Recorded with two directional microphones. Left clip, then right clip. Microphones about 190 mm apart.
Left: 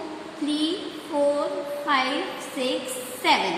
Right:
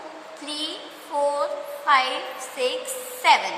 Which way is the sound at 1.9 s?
25° right (ahead or behind).